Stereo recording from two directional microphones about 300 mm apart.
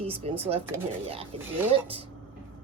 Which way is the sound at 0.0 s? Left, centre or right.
Centre.